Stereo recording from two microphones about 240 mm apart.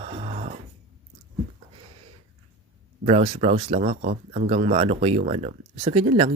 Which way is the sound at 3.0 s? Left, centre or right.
Right.